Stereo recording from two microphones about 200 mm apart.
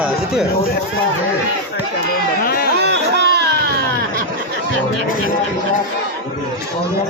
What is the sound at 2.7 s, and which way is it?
Music, 55° right (ahead or behind).